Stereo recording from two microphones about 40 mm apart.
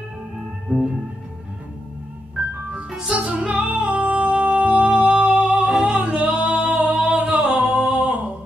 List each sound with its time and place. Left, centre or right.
0.7 s music: right
2.4 s music: right
2.7 s music: centre
3.6 s music: right
7.3 s singing: right
7.9 s a sound: right